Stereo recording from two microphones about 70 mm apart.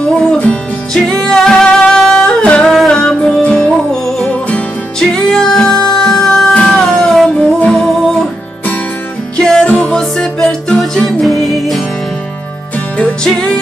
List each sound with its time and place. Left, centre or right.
0.0 s music: centre
4.3 s music: centre
5.1 s music: centre
5.7 s music: left
5.9 s music: centre
9.4 s music: centre
12.9 s music: centre